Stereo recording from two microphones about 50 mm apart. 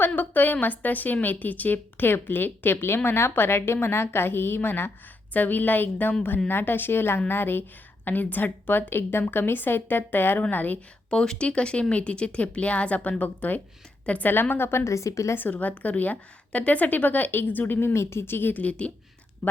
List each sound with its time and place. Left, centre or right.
0.1 s a woman's voice: left
5.3 s a woman's voice: left
8.0 s a woman's voice: left
11.1 s a woman's voice: centre
14.5 s a woman's voice: left
15.4 s a woman's voice: left
17.7 s a woman's voice: left
18.5 s speech: left